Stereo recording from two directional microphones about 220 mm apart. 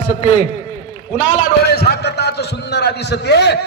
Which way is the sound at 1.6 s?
45° left (ahead or behind).